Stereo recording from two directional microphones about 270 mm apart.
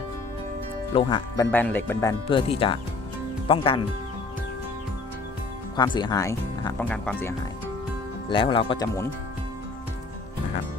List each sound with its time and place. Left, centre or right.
0.9 s speech: centre
1.5 s speech: centre
5.7 s speech: centre
8.3 s speech: centre